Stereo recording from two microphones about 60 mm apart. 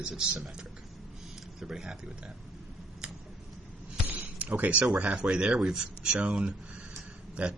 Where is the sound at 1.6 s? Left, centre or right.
Centre.